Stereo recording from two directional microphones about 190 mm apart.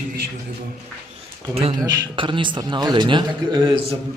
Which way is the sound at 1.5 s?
30° right (ahead or behind).